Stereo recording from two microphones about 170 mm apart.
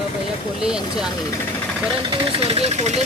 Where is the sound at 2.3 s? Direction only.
35° right (ahead or behind).